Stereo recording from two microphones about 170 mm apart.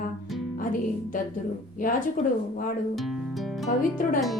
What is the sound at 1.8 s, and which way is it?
Speech, 55° left (ahead or behind).